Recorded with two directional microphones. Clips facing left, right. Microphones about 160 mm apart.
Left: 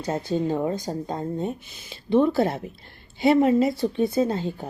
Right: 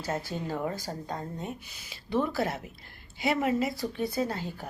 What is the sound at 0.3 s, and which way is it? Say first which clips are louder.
Speech: left 9 dB; 20° left (ahead or behind).